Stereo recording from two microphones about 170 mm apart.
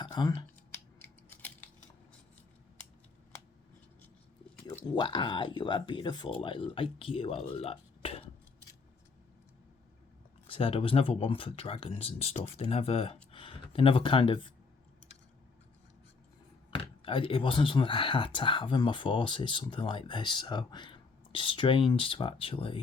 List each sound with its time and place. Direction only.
0.0 s speech: 25° left (ahead or behind)
0.9 s scissors: 10° left (ahead or behind)
4.9 s speech: 30° left (ahead or behind)
10.4 s speech: 35° left (ahead or behind)
16.7 s speech: 30° left (ahead or behind)